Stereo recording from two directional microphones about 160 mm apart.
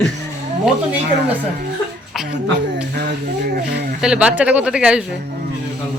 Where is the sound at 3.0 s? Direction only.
75° right (ahead or behind).